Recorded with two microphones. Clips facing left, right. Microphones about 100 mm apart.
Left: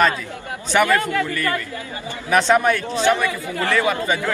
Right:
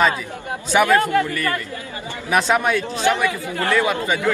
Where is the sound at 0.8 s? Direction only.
30° right (ahead or behind).